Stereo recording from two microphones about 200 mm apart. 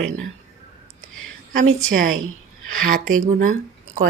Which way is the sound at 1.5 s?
45° right (ahead or behind).